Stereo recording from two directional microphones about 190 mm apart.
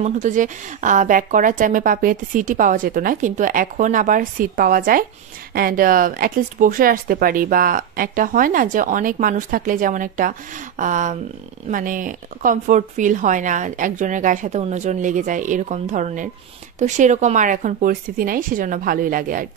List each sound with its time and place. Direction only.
0.0 s a woman's voice: 40° right (ahead or behind)